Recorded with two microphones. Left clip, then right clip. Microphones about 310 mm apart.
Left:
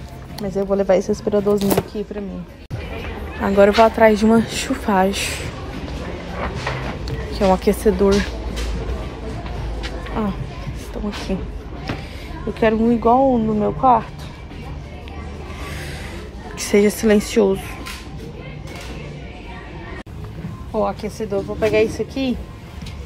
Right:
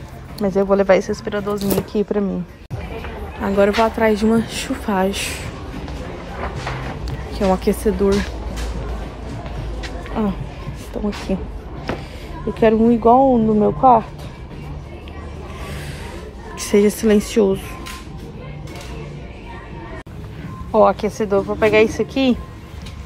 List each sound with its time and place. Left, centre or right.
0.4 s a woman's voice: centre
1.6 s a woman's voice: centre
3.3 s a woman's voice: centre
7.1 s speech: centre
10.2 s speech: centre
10.9 s music: centre
12.5 s speech: centre
16.5 s speech: centre
20.7 s a woman's voice: centre